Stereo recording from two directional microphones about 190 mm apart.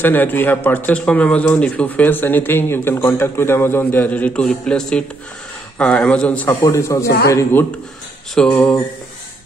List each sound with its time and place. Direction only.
0.0 s speech: 10° left (ahead or behind)